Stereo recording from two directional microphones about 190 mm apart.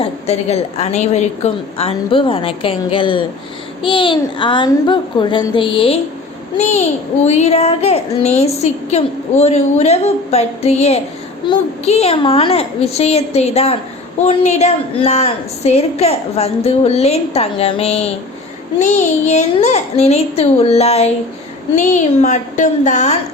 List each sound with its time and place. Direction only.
0.0 s a woman's voice: 35° left (ahead or behind)